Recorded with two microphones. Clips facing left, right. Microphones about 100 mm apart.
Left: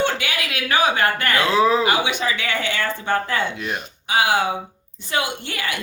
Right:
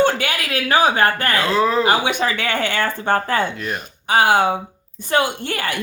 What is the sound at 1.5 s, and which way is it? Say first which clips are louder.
Speech: left 1 dB; centre (ahead or behind).